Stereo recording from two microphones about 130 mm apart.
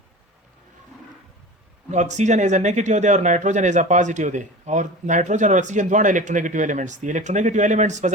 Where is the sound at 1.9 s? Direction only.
65° right (ahead or behind).